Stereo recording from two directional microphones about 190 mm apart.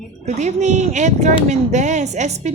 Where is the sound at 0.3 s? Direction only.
40° right (ahead or behind).